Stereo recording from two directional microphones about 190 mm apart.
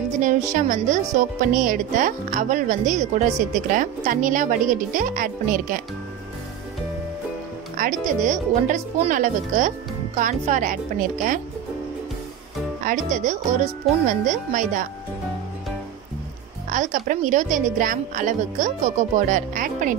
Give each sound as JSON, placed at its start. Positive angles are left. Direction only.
{"t": 0.2, "sound": "a woman's voice", "side_deg": -45}
{"t": 7.7, "sound": "a woman's voice", "side_deg": -45}
{"t": 12.8, "sound": "a woman's voice", "side_deg": -40}
{"t": 16.6, "sound": "a woman's voice", "side_deg": -40}